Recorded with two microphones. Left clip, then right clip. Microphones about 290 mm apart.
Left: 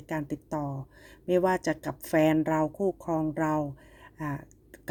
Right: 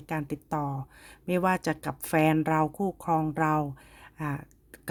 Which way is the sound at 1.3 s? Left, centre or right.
Right.